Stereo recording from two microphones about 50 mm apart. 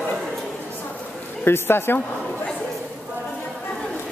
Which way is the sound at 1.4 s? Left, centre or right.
Left.